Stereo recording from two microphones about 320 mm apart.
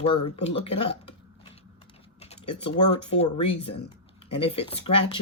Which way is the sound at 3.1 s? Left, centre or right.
Centre.